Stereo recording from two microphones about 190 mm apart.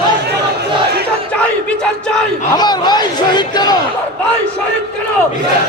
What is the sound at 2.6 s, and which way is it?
A man's voice, 20° left (ahead or behind).